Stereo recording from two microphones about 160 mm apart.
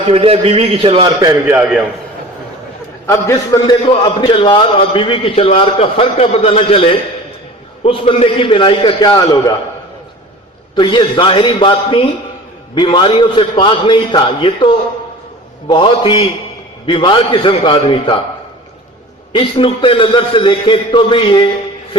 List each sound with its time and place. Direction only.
0.0 s a man's voice: 35° right (ahead or behind)
1.2 s a man's voice: 20° right (ahead or behind)
3.1 s a man's voice: 20° left (ahead or behind)
3.8 s a man's voice: 30° left (ahead or behind)
10.8 s a man's voice: 30° left (ahead or behind)
19.3 s a man's voice: 35° left (ahead or behind)